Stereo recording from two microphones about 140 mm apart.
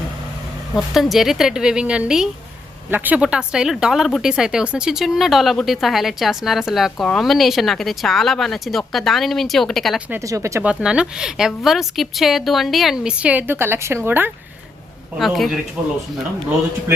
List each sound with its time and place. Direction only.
0.8 s speech: centre (ahead or behind)
10.1 s speech: 20° right (ahead or behind)
10.6 s speech: 10° right (ahead or behind)
15.2 s speech: centre (ahead or behind)